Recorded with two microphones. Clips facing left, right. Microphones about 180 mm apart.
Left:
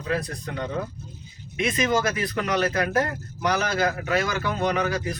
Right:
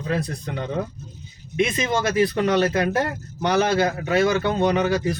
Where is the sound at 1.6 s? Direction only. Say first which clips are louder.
Right 1 dB; 30° right (ahead or behind).